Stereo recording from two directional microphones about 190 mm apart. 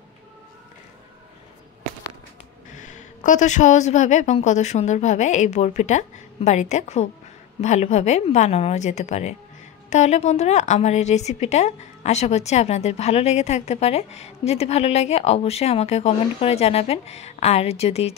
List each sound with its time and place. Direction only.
2.7 s a woman's voice: 40° left (ahead or behind)